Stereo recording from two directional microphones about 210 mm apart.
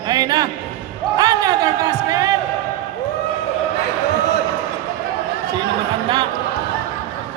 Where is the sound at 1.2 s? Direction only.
15° right (ahead or behind).